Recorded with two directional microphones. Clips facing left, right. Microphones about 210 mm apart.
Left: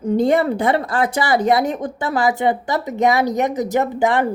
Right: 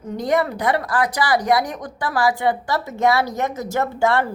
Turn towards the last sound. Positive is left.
turn(degrees=15)  # may be behind; listen again after turning